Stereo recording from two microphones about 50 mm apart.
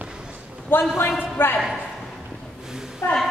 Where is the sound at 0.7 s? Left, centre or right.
Left.